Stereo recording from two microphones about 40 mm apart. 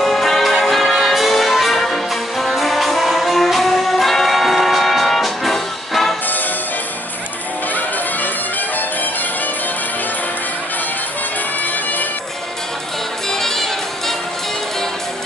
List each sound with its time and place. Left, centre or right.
0.0 s music: centre
13.3 s music: centre